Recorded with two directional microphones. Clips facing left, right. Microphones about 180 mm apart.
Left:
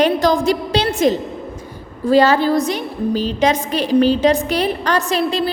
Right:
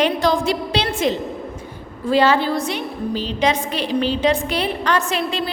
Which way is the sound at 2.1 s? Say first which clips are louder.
Left 4 dB; 40° left (ahead or behind).